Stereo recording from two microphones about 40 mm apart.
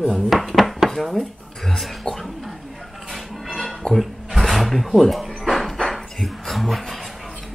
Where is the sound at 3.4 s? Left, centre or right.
Centre.